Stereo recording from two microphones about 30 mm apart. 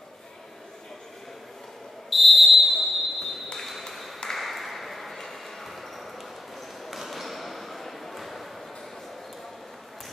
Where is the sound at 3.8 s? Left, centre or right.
Centre.